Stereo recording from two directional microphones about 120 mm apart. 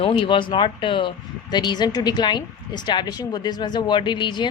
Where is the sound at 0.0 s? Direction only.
45° left (ahead or behind).